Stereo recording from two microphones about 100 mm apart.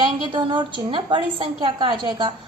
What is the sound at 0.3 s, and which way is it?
A woman's voice, 60° right (ahead or behind).